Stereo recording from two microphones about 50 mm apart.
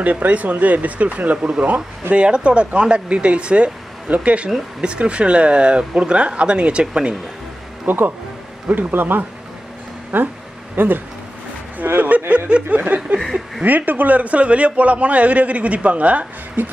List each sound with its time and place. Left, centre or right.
0.0 s a man's voice: right
7.8 s speech: right
8.7 s a sound: right
11.8 s speech: right
12.3 s a man's voice: right
12.6 s a sound: right
13.7 s a man's voice: right